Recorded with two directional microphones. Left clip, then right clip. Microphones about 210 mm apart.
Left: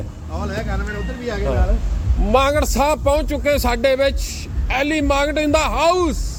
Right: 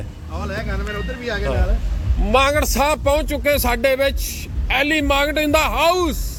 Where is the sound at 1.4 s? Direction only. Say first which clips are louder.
Left 1 dB; 5° left (ahead or behind).